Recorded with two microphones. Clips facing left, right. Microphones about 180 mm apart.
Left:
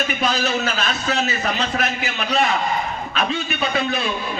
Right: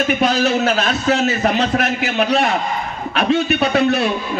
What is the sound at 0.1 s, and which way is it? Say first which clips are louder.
A man's voice: right 6 dB; 60° right (ahead or behind).